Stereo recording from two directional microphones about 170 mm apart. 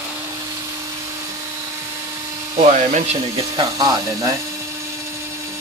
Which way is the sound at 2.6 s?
45° right (ahead or behind).